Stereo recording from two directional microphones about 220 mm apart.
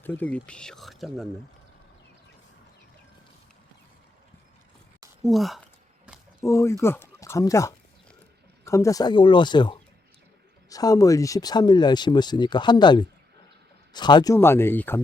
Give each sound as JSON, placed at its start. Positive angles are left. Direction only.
{"t": 0.0, "sound": "speech", "side_deg": 10}
{"t": 5.2, "sound": "speech", "side_deg": 0}
{"t": 6.1, "sound": "a sound", "side_deg": -5}
{"t": 6.4, "sound": "speech", "side_deg": 15}